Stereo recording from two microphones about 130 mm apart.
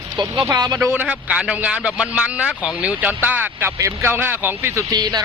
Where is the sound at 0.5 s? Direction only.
30° right (ahead or behind).